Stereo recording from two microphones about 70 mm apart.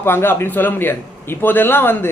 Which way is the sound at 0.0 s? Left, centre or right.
Left.